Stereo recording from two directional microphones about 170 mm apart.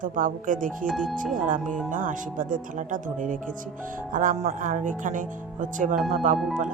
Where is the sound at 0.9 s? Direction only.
Centre (ahead or behind).